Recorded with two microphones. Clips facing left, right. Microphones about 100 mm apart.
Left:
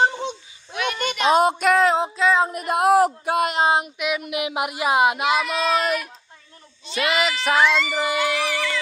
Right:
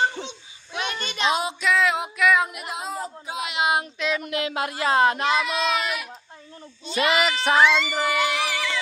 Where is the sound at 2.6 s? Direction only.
65° left (ahead or behind).